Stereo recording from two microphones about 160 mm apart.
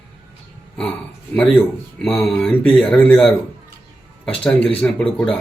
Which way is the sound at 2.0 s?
5° left (ahead or behind).